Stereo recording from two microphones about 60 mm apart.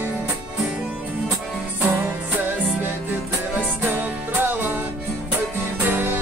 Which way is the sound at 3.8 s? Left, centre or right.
Right.